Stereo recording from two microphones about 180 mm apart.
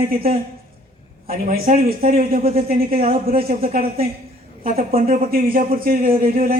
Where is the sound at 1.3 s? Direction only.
55° right (ahead or behind).